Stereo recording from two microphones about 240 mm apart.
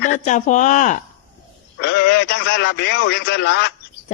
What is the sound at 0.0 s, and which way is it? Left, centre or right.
A woman's voice, left.